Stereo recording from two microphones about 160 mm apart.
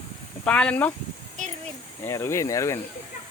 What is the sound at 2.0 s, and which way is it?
Speech, 15° left (ahead or behind).